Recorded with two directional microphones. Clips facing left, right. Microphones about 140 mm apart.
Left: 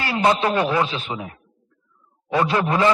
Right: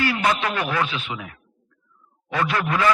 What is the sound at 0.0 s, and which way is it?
A man's voice, 30° left (ahead or behind).